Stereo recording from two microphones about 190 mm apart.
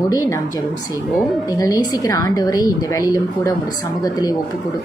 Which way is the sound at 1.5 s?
20° left (ahead or behind).